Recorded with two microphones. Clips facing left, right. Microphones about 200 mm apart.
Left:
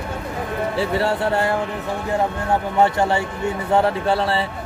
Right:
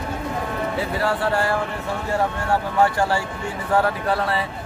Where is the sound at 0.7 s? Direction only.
25° left (ahead or behind).